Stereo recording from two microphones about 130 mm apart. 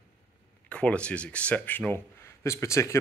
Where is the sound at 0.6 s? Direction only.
10° left (ahead or behind).